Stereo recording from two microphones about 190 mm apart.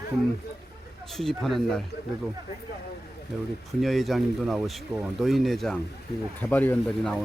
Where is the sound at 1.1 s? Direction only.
Centre (ahead or behind).